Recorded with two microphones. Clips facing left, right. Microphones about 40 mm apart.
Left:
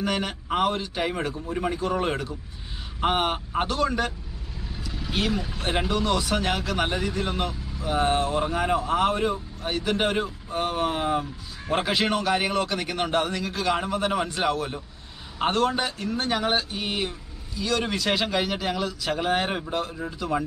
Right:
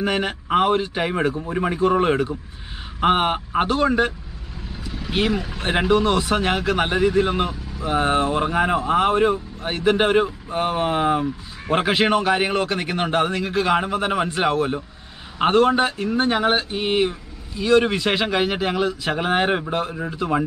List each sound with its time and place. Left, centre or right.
0.0 s speech: right